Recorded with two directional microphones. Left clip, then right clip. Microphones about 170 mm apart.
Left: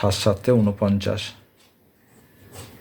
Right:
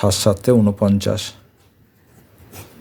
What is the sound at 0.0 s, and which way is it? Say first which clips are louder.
Speech: right 4 dB; 45° right (ahead or behind).